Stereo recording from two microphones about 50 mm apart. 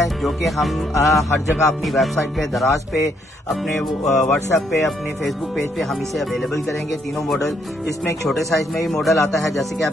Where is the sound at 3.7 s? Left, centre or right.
Centre.